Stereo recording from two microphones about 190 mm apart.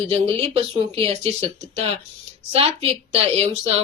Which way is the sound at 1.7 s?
30° right (ahead or behind).